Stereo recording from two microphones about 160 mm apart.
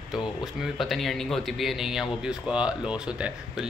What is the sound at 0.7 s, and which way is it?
Speech, centre (ahead or behind).